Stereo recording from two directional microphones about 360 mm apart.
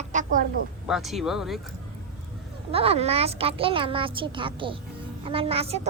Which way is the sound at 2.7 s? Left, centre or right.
Centre.